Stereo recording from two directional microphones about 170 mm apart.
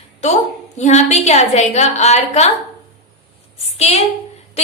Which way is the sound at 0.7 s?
45° left (ahead or behind).